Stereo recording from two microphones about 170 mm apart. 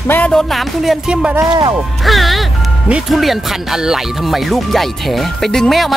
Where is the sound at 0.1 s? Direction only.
5° left (ahead or behind).